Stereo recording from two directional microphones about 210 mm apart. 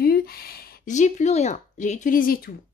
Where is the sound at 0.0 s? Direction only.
45° left (ahead or behind).